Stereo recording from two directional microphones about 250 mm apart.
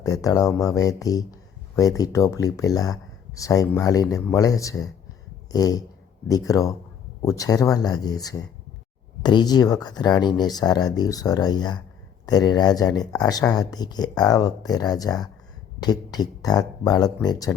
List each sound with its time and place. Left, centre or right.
0.0 s speech: centre
5.5 s a sound: centre
6.2 s speech: centre